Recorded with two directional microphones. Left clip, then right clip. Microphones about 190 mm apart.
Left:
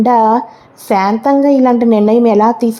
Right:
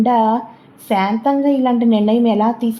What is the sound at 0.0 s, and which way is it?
A woman's voice, 25° left (ahead or behind).